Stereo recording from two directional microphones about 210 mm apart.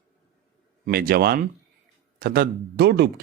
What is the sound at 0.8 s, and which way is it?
Speech, 45° right (ahead or behind).